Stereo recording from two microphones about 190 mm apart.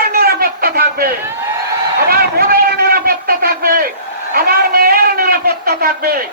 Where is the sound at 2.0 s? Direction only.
50° right (ahead or behind).